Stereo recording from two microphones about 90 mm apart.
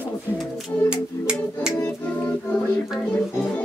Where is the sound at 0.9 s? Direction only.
10° right (ahead or behind).